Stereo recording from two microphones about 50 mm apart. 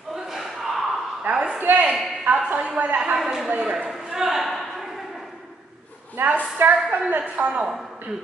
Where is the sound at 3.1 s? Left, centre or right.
Centre.